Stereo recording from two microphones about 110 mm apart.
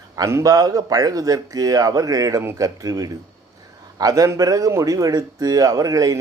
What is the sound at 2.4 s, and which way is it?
Speech, 20° right (ahead or behind).